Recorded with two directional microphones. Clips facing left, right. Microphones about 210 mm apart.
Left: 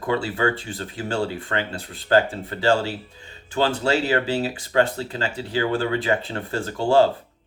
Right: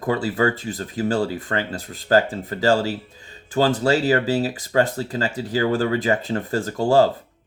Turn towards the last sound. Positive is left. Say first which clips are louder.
# right 1 dB
turn(degrees=-40)  # may be behind; listen again after turning